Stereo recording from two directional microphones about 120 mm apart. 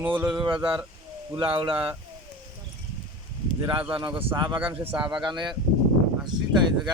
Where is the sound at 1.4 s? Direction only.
45° right (ahead or behind).